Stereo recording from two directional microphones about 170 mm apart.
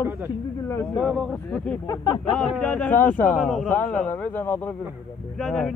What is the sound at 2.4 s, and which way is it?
Speech, 5° left (ahead or behind).